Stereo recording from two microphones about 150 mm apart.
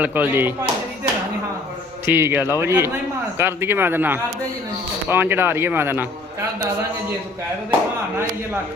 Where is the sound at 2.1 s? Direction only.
15° right (ahead or behind).